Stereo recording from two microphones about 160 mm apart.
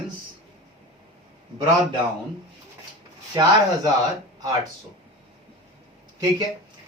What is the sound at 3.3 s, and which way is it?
Speech, 20° right (ahead or behind).